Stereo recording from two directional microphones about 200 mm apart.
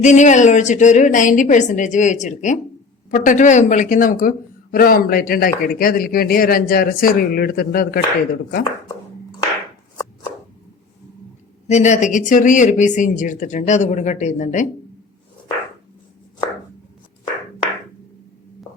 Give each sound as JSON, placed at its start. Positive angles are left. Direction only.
{"t": 0.0, "sound": "speech", "side_deg": 35}
{"t": 11.7, "sound": "speech", "side_deg": 35}